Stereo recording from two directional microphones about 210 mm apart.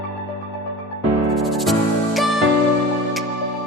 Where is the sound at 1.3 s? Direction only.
Centre (ahead or behind).